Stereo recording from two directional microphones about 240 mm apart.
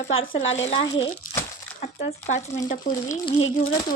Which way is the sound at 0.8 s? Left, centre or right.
Left.